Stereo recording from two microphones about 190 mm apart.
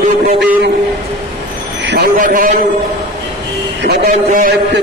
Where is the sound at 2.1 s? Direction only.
45° right (ahead or behind).